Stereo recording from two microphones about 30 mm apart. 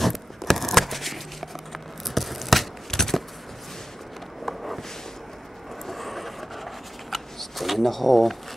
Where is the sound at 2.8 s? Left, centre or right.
Centre.